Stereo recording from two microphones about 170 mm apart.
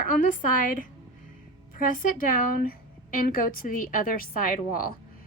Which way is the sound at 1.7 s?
55° left (ahead or behind).